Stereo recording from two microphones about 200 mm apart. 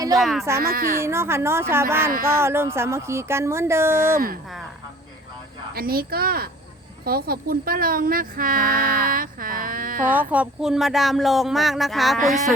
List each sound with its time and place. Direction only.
0.2 s speech: centre (ahead or behind)
0.6 s speech: 45° right (ahead or behind)
1.0 s speech: 15° right (ahead or behind)
5.7 s speech: 50° right (ahead or behind)
10.1 s speech: 10° right (ahead or behind)